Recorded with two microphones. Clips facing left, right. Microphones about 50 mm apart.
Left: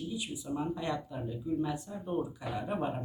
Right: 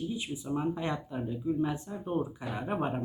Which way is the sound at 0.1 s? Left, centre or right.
Right.